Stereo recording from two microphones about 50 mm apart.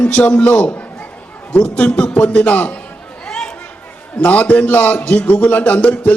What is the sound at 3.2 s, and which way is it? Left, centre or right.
Chatter, centre.